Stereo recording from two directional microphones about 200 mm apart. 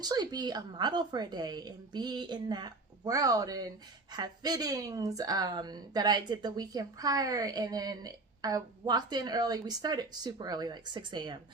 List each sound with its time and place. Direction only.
0.0 s a woman's voice: 20° right (ahead or behind)